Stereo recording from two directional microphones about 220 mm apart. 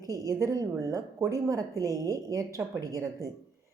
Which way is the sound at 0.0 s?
15° right (ahead or behind).